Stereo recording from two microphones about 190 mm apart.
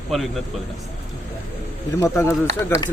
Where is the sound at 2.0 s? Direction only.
15° left (ahead or behind).